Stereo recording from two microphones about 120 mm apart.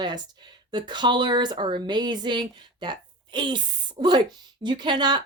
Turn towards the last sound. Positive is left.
turn(degrees=-40)  # may be behind; listen again after turning